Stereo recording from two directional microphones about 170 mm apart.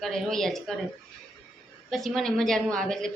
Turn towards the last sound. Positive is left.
turn(degrees=5)  # may be behind; listen again after turning